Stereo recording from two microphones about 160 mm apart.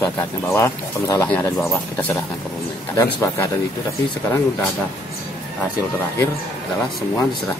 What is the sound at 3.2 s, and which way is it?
Speech, 20° left (ahead or behind).